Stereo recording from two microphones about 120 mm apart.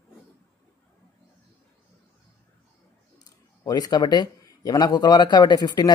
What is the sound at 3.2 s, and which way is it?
Speech, 35° left (ahead or behind).